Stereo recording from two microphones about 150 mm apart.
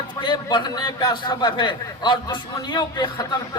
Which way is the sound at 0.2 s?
30° left (ahead or behind).